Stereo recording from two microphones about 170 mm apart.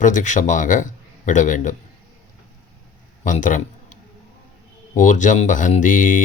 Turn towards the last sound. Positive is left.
turn(degrees=50)  # may be behind; listen again after turning